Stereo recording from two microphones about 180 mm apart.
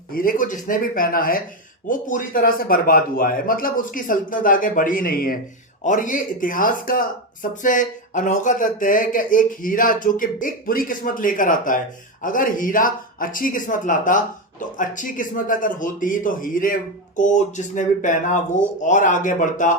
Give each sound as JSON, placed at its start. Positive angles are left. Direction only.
{"t": 0.1, "sound": "speech", "side_deg": 50}